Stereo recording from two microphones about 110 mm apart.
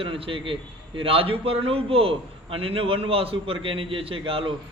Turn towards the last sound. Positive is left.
turn(degrees=-55)  # may be behind; listen again after turning